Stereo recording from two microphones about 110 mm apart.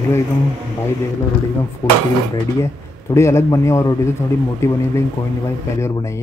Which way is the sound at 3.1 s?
25° left (ahead or behind).